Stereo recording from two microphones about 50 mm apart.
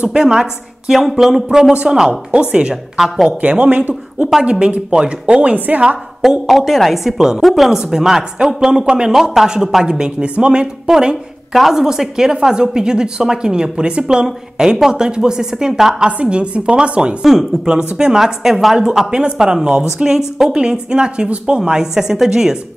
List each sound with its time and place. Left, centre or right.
0.0 s a woman's voice: centre
2.7 s a woman's voice: centre
3.3 s a woman's voice: right
6.4 s a woman's voice: centre
9.1 s a woman's voice: centre
9.8 s a woman's voice: centre
16.1 s a woman's voice: right
17.2 s a woman's voice: centre